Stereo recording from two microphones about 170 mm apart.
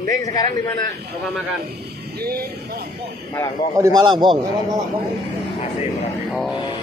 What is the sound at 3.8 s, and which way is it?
A man's voice, 20° right (ahead or behind).